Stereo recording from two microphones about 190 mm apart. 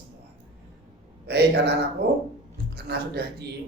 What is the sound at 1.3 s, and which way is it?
A woman's voice, 60° right (ahead or behind).